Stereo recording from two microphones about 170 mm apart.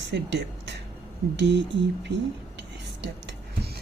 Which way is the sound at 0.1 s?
90° right.